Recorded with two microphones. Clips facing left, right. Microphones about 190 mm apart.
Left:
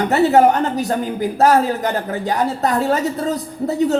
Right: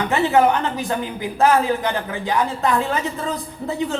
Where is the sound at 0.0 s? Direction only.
40° left (ahead or behind).